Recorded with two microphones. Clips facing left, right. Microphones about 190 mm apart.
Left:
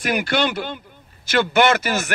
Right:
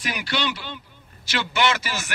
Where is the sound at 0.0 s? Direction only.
50° left (ahead or behind).